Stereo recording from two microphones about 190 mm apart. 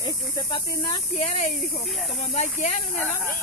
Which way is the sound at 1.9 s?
Centre (ahead or behind).